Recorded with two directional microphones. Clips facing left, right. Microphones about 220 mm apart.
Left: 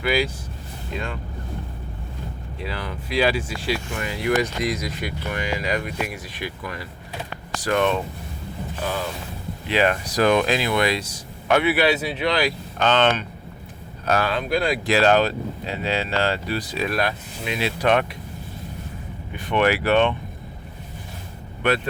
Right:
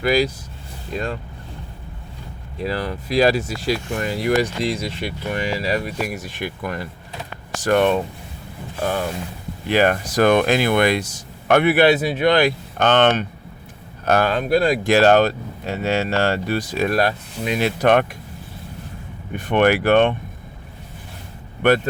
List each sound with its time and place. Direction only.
0.0 s speech: 40° right (ahead or behind)
2.6 s speech: 40° right (ahead or behind)
19.4 s speech: 50° right (ahead or behind)